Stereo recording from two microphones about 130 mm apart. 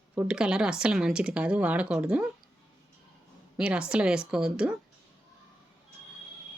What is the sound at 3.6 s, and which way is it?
Speech, 10° right (ahead or behind).